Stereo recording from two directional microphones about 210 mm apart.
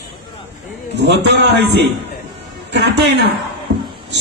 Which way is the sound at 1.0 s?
55° right (ahead or behind).